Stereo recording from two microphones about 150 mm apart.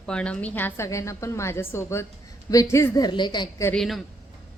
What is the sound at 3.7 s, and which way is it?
Speech, centre (ahead or behind).